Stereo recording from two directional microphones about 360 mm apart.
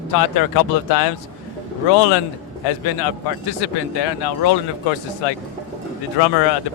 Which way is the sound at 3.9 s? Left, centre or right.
Left.